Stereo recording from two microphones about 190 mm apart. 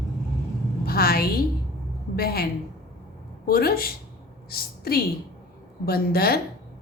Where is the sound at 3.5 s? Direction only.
50° left (ahead or behind).